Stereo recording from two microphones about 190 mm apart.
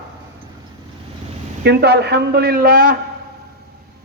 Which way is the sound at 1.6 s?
60° right (ahead or behind).